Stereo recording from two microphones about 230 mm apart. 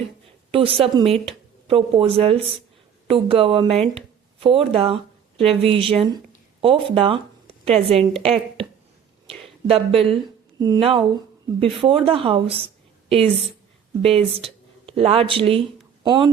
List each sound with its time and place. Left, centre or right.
0.5 s speech: right
9.6 s a woman's voice: right